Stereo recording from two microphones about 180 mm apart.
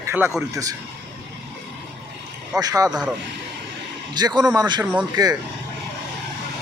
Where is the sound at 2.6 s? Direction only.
20° right (ahead or behind).